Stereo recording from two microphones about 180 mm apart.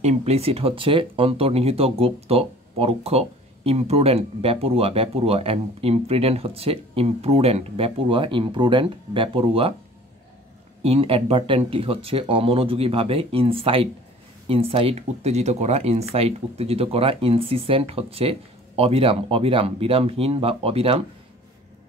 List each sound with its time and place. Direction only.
0.0 s speech: 35° right (ahead or behind)
10.8 s speech: 35° right (ahead or behind)